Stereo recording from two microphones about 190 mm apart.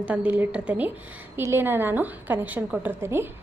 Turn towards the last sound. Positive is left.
turn(degrees=-15)  # may be behind; listen again after turning